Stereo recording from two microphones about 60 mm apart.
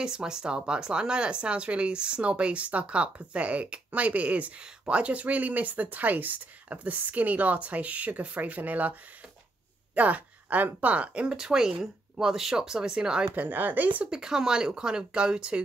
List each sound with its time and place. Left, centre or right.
0.0 s speech: centre
9.9 s speech: right
11.3 s speech: centre
13.3 s speech: right
14.1 s speech: centre